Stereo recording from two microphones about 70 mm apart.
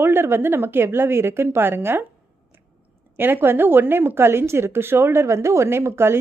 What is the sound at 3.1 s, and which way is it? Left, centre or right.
Speech, right.